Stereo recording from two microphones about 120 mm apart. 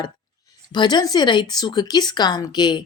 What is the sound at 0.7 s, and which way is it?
Speech, 35° left (ahead or behind).